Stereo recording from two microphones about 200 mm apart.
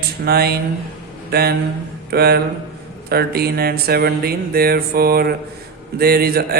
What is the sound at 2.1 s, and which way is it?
Mantra, 50° right (ahead or behind).